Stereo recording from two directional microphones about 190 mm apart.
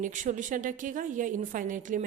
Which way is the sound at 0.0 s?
40° right (ahead or behind).